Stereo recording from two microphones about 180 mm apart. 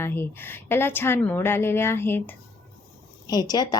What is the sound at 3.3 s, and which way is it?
Speech, 20° left (ahead or behind).